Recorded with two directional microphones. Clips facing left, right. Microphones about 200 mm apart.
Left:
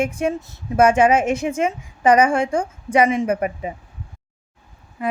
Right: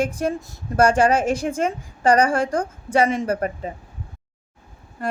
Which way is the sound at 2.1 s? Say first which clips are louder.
Left 2 dB; 10° left (ahead or behind).